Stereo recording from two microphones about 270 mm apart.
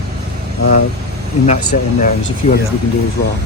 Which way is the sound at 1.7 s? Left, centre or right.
Left.